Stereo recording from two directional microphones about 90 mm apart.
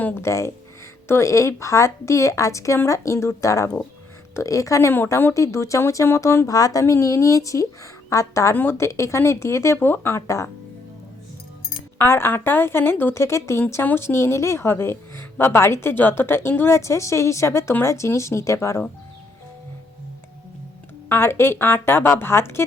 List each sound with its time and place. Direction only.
0.0 s speech: 25° left (ahead or behind)
11.9 s speech: 25° left (ahead or behind)
21.1 s speech: 25° left (ahead or behind)